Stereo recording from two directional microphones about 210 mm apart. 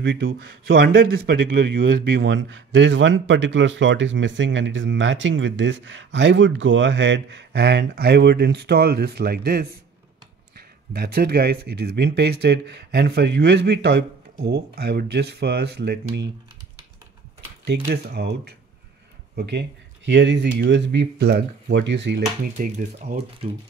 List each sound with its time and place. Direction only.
0.0 s a man's voice: 55° right (ahead or behind)
10.9 s speech: 45° right (ahead or behind)
17.6 s speech: 50° right (ahead or behind); by 23.5 s 30° right (ahead or behind)